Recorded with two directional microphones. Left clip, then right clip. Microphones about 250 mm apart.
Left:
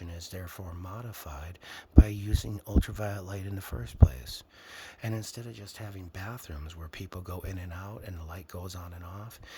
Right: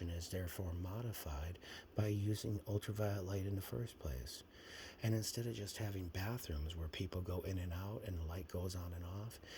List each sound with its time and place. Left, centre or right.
0.0 s speech: centre